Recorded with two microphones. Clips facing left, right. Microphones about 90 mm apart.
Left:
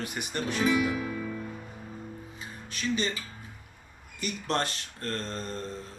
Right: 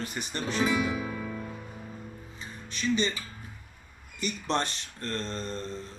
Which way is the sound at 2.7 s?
5° left (ahead or behind).